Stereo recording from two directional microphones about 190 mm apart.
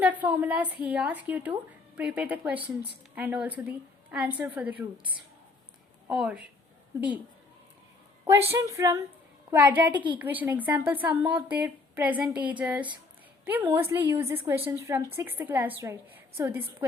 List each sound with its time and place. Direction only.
0.0 s a woman's voice: 10° right (ahead or behind)
8.3 s a woman's voice: 15° right (ahead or behind)
9.9 s a woman's voice: 25° right (ahead or behind)
10.2 s a woman's voice: 10° right (ahead or behind)